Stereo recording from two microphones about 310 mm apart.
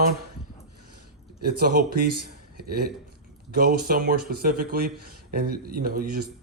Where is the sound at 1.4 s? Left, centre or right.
Right.